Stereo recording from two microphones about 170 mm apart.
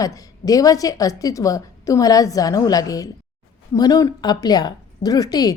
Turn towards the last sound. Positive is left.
turn(degrees=20)  # may be behind; listen again after turning